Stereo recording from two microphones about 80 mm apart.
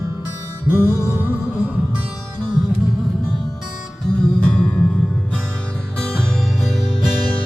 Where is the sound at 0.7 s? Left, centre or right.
Right.